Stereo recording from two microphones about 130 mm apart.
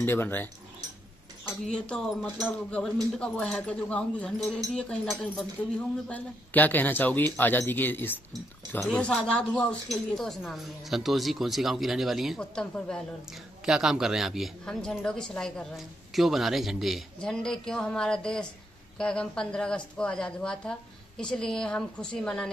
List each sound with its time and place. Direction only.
0.0 s speech: 15° left (ahead or behind)
1.7 s speech: 5° left (ahead or behind)
13.7 s speech: 5° right (ahead or behind)